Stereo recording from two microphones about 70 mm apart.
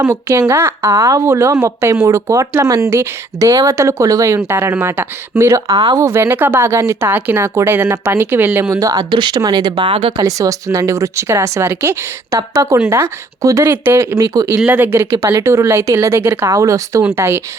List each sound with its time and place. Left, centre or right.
0.0 s speech: right
5.6 s speech: right
6.0 s speech: right
7.1 s speech: right
8.7 s speech: right
10.2 s speech: right
12.3 s speech: right
13.7 s speech: right
14.4 s speech: right
14.9 s speech: right
16.5 s speech: right
17.1 s speech: right